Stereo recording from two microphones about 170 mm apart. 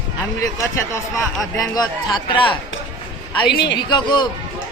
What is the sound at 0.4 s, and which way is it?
A man's voice, 20° left (ahead or behind).